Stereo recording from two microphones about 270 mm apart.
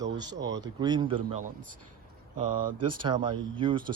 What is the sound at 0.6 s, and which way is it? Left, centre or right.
Speech, centre.